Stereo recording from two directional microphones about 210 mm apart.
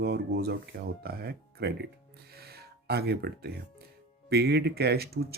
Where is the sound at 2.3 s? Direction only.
50° right (ahead or behind).